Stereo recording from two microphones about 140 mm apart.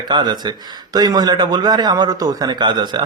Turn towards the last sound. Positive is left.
turn(degrees=-30)  # may be behind; listen again after turning